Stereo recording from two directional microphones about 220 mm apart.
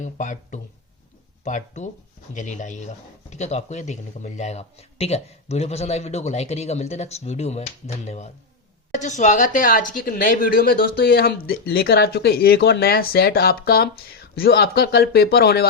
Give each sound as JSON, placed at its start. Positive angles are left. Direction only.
{"t": 0.0, "sound": "speech", "side_deg": 35}